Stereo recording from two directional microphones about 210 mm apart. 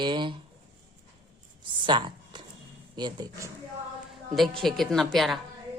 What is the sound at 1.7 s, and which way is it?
A woman's voice, 20° right (ahead or behind).